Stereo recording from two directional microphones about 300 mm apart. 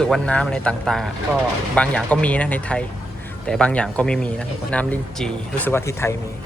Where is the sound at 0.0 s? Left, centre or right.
Centre.